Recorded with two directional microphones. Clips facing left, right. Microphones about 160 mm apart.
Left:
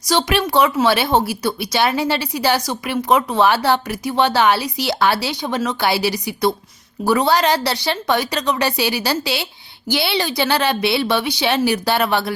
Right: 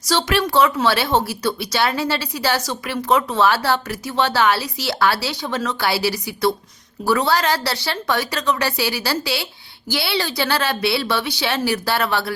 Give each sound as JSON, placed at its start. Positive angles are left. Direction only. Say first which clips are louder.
{"t": 0.1, "sound": "a woman's voice", "louder": "left 1 dB", "side_deg": 15}